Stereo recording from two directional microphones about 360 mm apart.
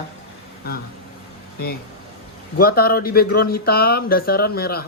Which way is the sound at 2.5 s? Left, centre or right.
Left.